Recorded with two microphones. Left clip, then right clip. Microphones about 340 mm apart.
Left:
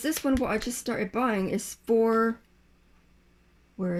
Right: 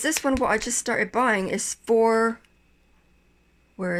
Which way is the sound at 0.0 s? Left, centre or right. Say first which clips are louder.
Right 4 dB; centre.